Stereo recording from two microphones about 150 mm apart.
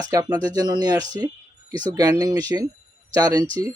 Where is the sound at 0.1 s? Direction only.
25° right (ahead or behind).